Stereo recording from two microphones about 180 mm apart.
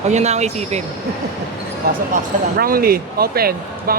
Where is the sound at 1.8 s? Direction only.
55° right (ahead or behind).